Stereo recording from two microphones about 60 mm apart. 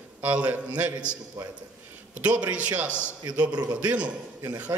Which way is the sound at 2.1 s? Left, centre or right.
Right.